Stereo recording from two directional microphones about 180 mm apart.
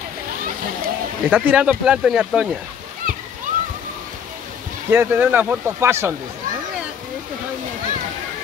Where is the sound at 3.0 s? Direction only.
50° right (ahead or behind).